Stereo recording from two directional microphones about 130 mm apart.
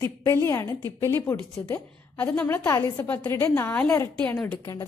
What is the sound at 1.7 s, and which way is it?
Speech, 10° left (ahead or behind).